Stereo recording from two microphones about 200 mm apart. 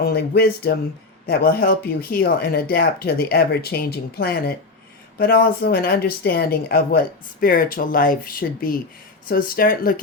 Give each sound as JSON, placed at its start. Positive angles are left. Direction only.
{"t": 0.0, "sound": "speech", "side_deg": 50}